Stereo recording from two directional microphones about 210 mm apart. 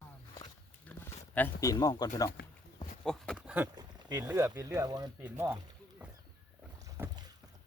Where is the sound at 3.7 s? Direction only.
20° right (ahead or behind).